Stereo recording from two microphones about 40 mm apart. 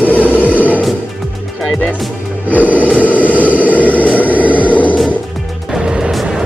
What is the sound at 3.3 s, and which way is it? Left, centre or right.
Vehicle, right.